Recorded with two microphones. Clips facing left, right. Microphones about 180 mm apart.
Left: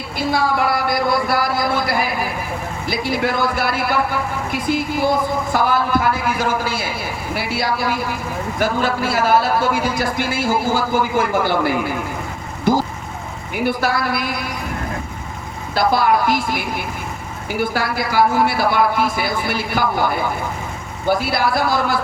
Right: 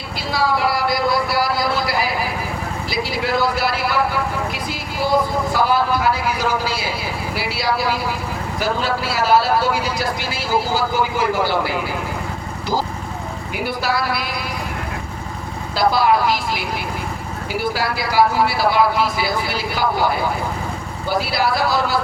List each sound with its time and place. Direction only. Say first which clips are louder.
0.2 s a sound: left 1 dB; 50° left (ahead or behind)
2.9 s a man's voice: left 2 dB; 50° left (ahead or behind)
15.9 s a man's voice: even; 50° left (ahead or behind)
21.2 s a man's voice: even; 50° left (ahead or behind)